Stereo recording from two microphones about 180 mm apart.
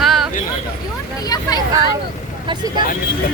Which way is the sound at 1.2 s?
20° left (ahead or behind).